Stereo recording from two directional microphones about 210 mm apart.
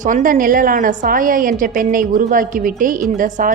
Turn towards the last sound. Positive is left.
turn(degrees=-40)  # may be behind; listen again after turning